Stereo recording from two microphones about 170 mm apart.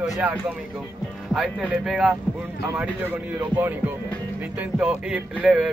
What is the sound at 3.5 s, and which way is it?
Speech, 10° right (ahead or behind).